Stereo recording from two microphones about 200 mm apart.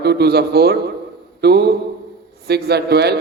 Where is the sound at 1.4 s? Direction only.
55° right (ahead or behind).